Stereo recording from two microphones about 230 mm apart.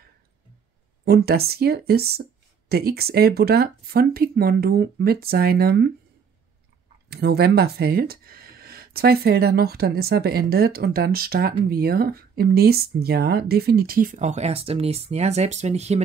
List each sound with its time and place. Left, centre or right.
1.0 s speech: right
7.1 s speech: right